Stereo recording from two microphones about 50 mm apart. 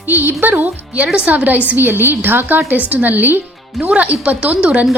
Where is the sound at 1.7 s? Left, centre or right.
Right.